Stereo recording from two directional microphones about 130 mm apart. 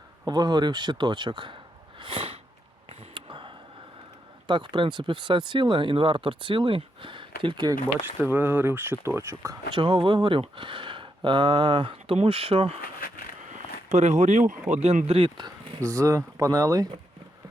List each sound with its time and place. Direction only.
0.3 s speech: 35° right (ahead or behind)
2.0 s a sound: 40° right (ahead or behind)
4.4 s speech: 40° right (ahead or behind)
8.2 s speech: 15° right (ahead or behind)
9.7 s speech: 40° right (ahead or behind)
13.5 s a sound: 65° right (ahead or behind)
14.8 s speech: 55° right (ahead or behind)
15.4 s speech: 35° right (ahead or behind)
15.8 s speech: 25° right (ahead or behind)